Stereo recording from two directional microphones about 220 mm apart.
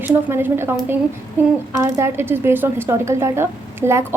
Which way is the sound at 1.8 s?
10° right (ahead or behind).